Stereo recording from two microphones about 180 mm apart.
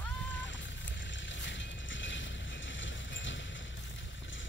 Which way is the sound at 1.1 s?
90° left.